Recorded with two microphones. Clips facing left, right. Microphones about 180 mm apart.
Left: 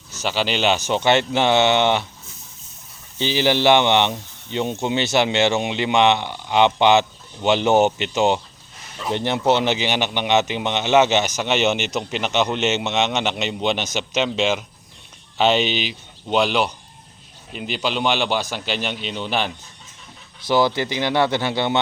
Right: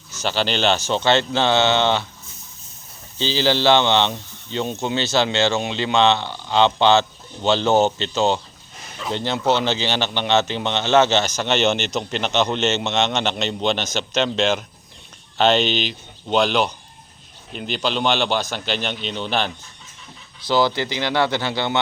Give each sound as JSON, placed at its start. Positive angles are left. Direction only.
{"t": 0.2, "sound": "speech", "side_deg": 10}
{"t": 3.2, "sound": "speech", "side_deg": 15}
{"t": 20.5, "sound": "speech", "side_deg": 20}